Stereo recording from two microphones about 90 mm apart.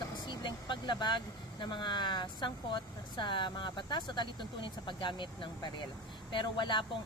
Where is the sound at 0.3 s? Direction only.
60° left (ahead or behind).